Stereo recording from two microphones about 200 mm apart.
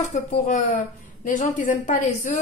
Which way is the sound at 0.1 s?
40° left (ahead or behind).